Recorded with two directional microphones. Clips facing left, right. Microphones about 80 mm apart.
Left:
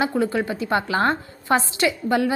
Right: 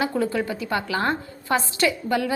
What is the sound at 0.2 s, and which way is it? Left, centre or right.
A woman's voice, left.